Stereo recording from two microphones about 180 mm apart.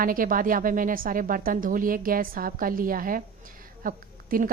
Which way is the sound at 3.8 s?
50° right (ahead or behind).